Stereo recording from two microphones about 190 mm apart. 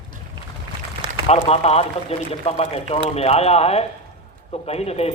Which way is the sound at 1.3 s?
35° left (ahead or behind).